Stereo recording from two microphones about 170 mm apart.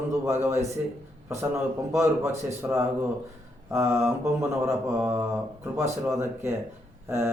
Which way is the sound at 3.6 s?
15° right (ahead or behind).